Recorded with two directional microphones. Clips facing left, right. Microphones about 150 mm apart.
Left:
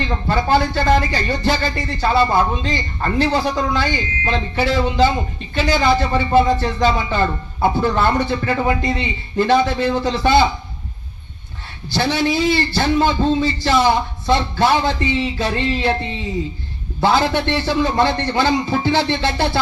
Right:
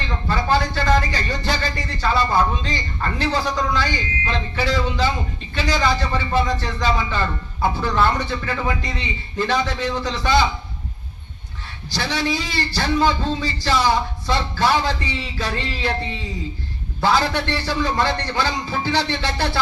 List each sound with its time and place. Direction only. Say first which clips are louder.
0.0 s speech: left 4 dB; 30° left (ahead or behind)
11.9 s speech: left 5 dB; 25° left (ahead or behind)
17.0 s speech: left 3 dB; 25° left (ahead or behind)